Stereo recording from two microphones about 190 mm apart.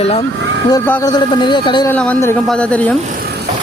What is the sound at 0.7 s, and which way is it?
A man's voice, 20° left (ahead or behind).